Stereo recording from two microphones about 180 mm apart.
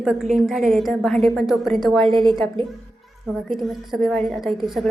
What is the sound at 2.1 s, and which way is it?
Speech, 25° right (ahead or behind).